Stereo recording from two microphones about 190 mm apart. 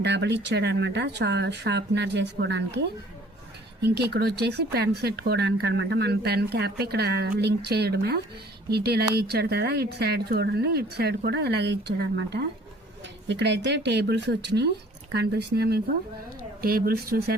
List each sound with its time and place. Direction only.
0.0 s speech: 65° right (ahead or behind)